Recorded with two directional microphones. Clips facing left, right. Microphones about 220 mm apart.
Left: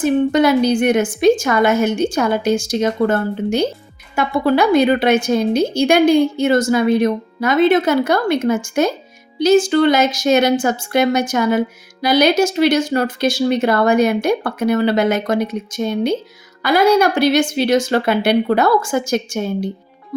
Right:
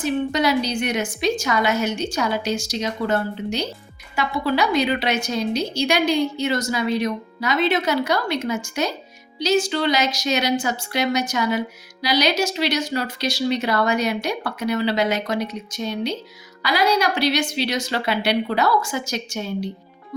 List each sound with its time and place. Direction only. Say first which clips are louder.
0.0 s a woman's voice: left 7 dB; 50° left (ahead or behind)